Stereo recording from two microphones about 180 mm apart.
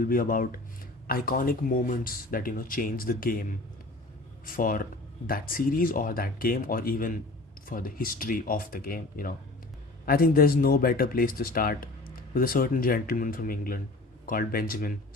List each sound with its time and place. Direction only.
0.0 s speech: 55° left (ahead or behind)
4.4 s speech: 50° left (ahead or behind)